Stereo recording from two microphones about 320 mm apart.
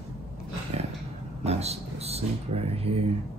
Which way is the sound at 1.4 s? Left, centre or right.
Centre.